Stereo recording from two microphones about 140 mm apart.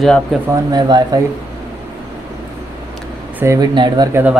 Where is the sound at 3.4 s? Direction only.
20° right (ahead or behind).